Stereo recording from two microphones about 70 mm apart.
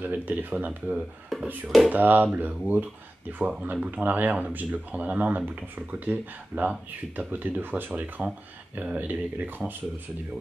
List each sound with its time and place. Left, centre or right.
0.0 s speech: right
1.3 s a sound: centre
1.9 s speech: right